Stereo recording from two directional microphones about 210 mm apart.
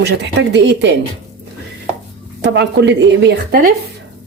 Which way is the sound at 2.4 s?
55° right (ahead or behind).